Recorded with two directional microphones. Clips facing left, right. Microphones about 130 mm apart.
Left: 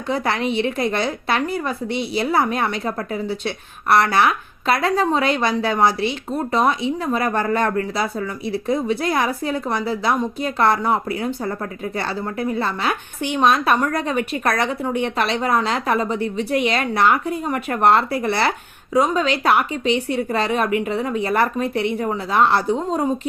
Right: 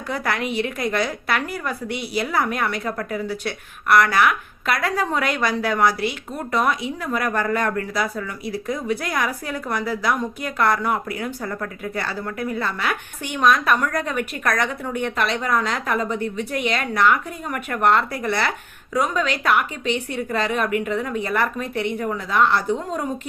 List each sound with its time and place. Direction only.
0.1 s a woman's voice: 25° left (ahead or behind)